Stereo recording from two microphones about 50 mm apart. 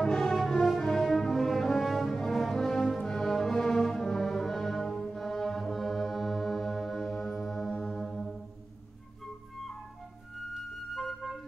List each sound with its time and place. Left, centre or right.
0.0 s music: centre
8.0 s brass instrument: centre